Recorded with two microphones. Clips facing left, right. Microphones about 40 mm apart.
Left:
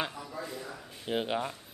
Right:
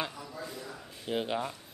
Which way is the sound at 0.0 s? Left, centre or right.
Centre.